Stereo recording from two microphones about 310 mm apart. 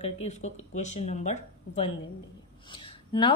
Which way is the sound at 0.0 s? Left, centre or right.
Left.